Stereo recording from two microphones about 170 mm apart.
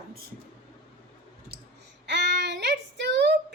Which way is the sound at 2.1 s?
85° right.